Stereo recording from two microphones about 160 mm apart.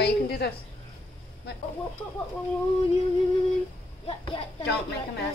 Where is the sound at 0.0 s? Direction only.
90° left.